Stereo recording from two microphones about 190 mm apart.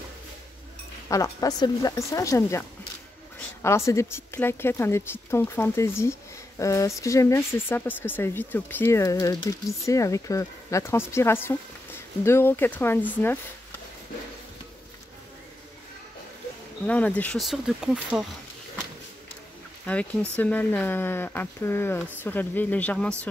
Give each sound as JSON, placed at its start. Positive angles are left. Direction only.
{"t": 1.0, "sound": "speech", "side_deg": 15}
{"t": 3.6, "sound": "speech", "side_deg": 15}
{"t": 16.8, "sound": "speech", "side_deg": 5}
{"t": 19.9, "sound": "speech", "side_deg": 5}